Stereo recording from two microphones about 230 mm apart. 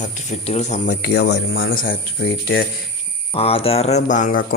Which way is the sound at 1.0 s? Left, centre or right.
Left.